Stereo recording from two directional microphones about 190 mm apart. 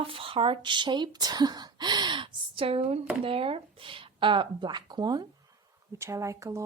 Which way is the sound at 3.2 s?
30° right (ahead or behind).